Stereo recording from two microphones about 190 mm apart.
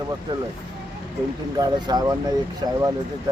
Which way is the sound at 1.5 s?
20° right (ahead or behind).